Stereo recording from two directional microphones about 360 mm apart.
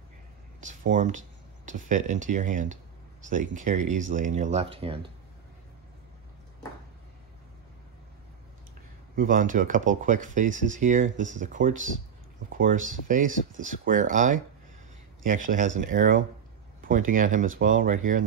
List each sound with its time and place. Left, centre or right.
0.6 s speech: right
9.1 s speech: right